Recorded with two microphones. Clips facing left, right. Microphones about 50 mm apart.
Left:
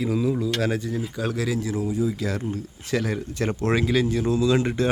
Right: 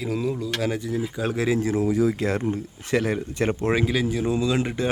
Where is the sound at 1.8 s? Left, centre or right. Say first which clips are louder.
Right 3 dB; right.